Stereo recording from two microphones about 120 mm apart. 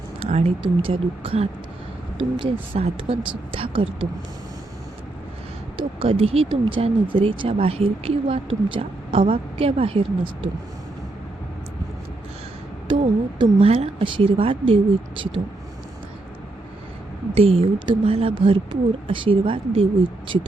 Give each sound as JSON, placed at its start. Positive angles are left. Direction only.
{"t": 0.2, "sound": "speech", "side_deg": -60}
{"t": 0.6, "sound": "speech", "side_deg": -45}
{"t": 5.7, "sound": "speech", "side_deg": -50}
{"t": 12.9, "sound": "speech", "side_deg": -45}
{"t": 17.3, "sound": "speech", "side_deg": -55}